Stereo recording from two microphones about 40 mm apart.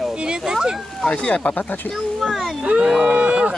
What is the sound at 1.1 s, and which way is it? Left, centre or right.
Speech, left.